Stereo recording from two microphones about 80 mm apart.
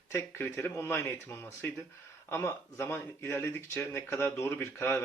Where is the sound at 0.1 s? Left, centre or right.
Left.